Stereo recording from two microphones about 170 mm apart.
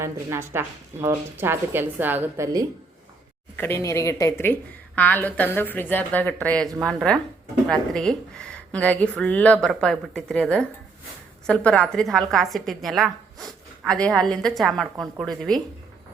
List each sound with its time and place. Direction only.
0.0 s speech: 15° right (ahead or behind)
3.6 s a woman's voice: 15° left (ahead or behind)